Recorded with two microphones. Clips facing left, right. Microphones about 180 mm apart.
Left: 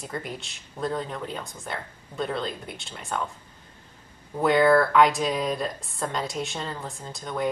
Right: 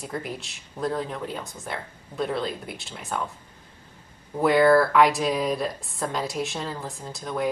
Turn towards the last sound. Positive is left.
turn(degrees=-5)  # may be behind; listen again after turning